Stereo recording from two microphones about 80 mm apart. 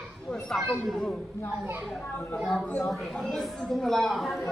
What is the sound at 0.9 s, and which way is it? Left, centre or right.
Speech, centre.